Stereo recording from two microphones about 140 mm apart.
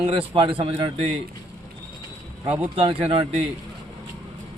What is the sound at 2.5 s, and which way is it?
Speech, 45° right (ahead or behind).